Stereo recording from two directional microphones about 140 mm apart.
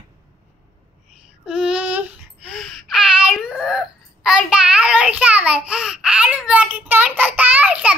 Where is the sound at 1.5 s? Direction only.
5° right (ahead or behind).